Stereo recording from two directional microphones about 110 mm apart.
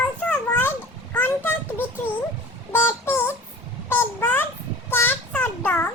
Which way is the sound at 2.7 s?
20° left (ahead or behind).